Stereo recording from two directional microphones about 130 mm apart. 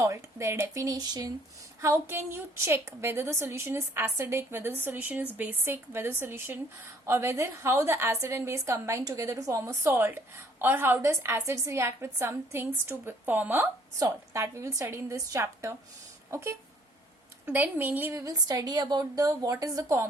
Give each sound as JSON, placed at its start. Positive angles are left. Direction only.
{"t": 0.0, "sound": "a woman's voice", "side_deg": -25}
{"t": 18.3, "sound": "a woman's voice", "side_deg": -30}